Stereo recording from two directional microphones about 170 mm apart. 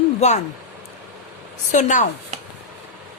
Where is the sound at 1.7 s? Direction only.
45° left (ahead or behind).